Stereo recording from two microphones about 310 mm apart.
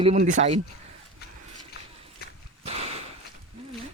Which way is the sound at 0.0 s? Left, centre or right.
Right.